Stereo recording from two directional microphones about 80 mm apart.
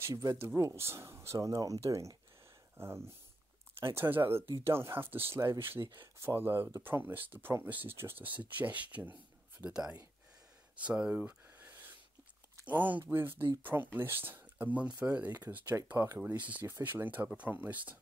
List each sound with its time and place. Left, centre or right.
0.1 s speech: right
0.6 s speech: right
9.7 s speech: centre
10.8 s a sound: centre
12.6 s speech: right